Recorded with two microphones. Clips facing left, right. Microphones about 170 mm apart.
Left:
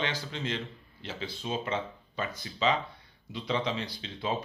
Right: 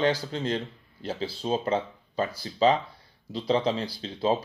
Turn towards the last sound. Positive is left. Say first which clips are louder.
# right 7 dB
turn(degrees=-35)  # may be behind; listen again after turning